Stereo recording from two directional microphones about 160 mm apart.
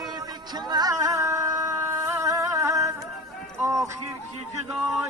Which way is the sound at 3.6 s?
20° right (ahead or behind).